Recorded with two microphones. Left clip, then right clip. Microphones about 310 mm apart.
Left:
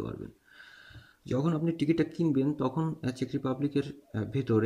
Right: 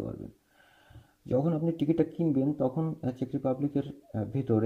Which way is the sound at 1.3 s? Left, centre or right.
Centre.